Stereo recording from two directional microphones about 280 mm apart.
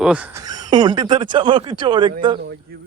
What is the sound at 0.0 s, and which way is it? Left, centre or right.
Speech, centre.